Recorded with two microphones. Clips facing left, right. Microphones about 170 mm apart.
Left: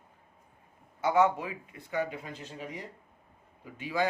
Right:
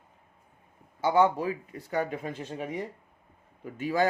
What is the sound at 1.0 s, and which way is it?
Speech, 30° right (ahead or behind).